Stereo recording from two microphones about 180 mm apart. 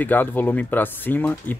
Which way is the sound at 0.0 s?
10° left (ahead or behind).